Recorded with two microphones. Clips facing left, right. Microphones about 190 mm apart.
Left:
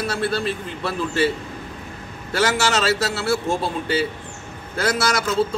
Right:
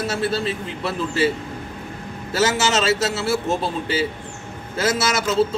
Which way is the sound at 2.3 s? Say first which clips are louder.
Right 1 dB; centre (ahead or behind).